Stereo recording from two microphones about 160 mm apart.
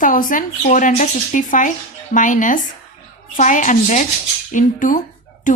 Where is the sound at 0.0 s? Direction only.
60° left (ahead or behind).